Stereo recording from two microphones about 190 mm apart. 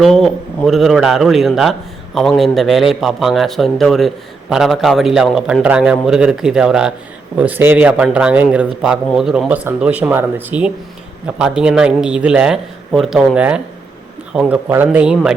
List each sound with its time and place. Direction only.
0.0 s a man's voice: centre (ahead or behind)